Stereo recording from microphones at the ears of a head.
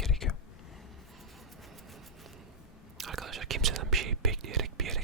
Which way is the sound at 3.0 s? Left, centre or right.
Right.